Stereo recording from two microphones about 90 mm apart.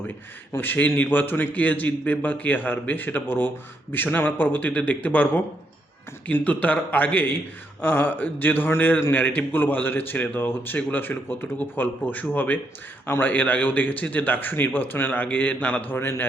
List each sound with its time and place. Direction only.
0.5 s a man's voice: 20° left (ahead or behind)